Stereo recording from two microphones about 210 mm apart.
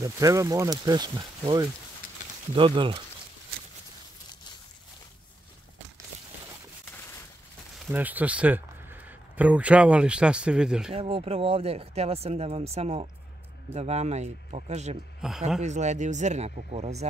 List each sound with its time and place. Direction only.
0.0 s speech: 15° right (ahead or behind)
7.8 s speech: 10° right (ahead or behind)
10.9 s speech: 25° right (ahead or behind)
15.2 s a man's voice: centre (ahead or behind)
15.6 s speech: 35° right (ahead or behind)